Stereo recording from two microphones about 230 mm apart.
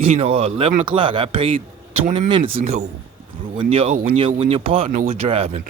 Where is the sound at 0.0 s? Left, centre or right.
Right.